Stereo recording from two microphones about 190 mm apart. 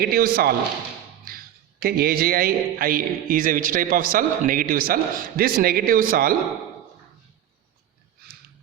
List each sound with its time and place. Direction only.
0.0 s a man's voice: 50° right (ahead or behind)